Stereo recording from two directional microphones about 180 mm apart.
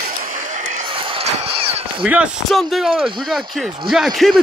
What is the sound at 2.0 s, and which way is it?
Speech, 5° right (ahead or behind).